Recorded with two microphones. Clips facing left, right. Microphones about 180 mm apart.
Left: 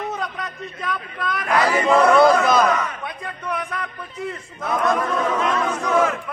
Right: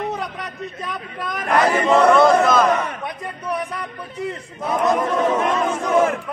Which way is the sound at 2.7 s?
35° right (ahead or behind).